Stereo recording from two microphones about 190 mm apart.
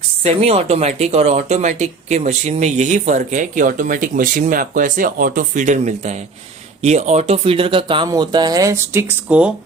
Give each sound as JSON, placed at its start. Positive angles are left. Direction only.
{"t": 0.2, "sound": "speech", "side_deg": -30}